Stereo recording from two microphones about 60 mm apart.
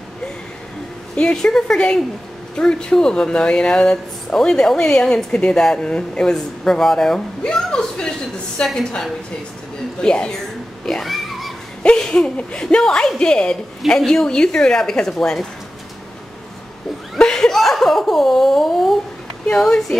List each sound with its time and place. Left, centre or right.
1.1 s speech: centre
10.0 s speech: centre
10.9 s a sound: centre
12.0 s speech: centre
17.2 s a sound: centre
19.6 s speech: centre